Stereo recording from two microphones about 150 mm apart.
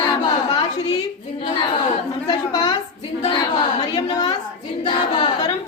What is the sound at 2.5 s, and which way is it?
A woman's voice, 25° left (ahead or behind).